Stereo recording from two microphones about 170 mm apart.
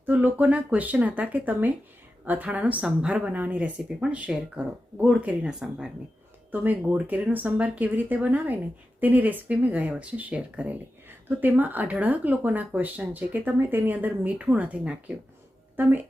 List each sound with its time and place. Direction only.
0.0 s speech: 10° right (ahead or behind)